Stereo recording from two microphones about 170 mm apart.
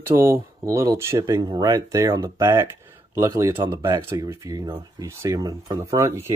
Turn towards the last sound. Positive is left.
turn(degrees=-15)  # may be behind; listen again after turning